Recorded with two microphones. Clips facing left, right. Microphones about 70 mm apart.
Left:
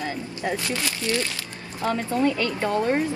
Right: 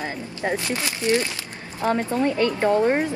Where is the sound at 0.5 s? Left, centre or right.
Right.